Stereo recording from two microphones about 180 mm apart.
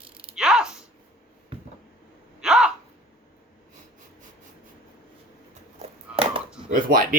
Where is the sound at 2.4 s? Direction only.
5° right (ahead or behind).